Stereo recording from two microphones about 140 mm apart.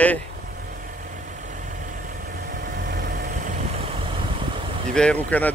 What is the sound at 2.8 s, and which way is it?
Vehicle, 75° right (ahead or behind).